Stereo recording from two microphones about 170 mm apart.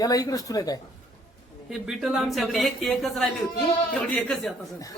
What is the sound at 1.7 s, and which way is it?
Speech, centre (ahead or behind).